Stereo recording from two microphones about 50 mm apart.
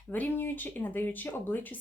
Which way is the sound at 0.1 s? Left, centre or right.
Left.